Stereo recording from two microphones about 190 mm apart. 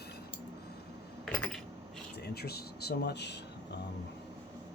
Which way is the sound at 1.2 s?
5° left (ahead or behind).